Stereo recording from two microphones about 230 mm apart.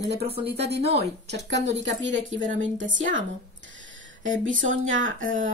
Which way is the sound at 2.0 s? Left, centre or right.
Right.